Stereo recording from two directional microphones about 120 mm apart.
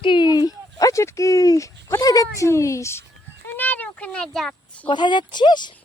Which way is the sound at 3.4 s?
15° left (ahead or behind).